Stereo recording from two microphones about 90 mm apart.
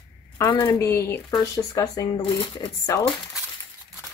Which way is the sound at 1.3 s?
45° left (ahead or behind).